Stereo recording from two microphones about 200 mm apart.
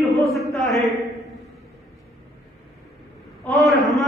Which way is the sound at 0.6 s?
Centre (ahead or behind).